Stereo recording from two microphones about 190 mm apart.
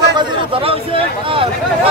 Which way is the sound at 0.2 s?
30° right (ahead or behind).